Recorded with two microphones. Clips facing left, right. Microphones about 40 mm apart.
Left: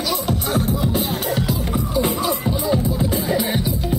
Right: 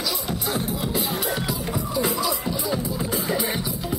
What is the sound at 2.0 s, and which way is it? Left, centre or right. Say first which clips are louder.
Music: left 4 dB; left.